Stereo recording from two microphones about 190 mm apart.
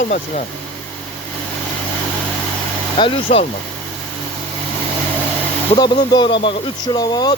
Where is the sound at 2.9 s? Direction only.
30° left (ahead or behind).